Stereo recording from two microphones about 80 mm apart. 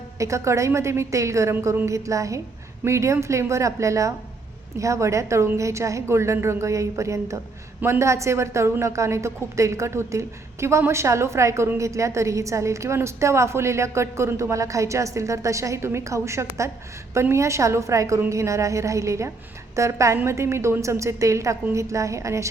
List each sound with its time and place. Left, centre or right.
0.2 s a woman's voice: right